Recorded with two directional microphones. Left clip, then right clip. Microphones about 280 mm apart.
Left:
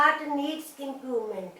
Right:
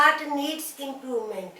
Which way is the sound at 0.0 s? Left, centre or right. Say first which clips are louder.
Right 3 dB; centre.